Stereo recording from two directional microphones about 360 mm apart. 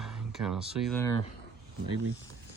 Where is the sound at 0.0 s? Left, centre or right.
Centre.